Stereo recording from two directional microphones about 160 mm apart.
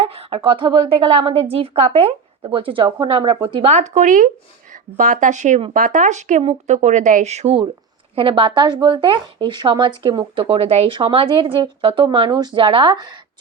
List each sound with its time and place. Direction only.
0.0 s speech: 40° right (ahead or behind)